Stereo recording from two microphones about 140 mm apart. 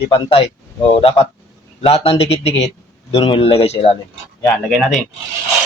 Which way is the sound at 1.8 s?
45° left (ahead or behind).